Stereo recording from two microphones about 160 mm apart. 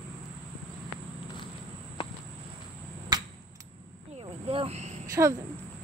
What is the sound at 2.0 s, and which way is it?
Cricket, 30° left (ahead or behind).